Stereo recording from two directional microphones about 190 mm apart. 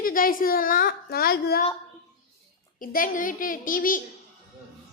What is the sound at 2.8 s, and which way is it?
A woman's voice, 45° left (ahead or behind).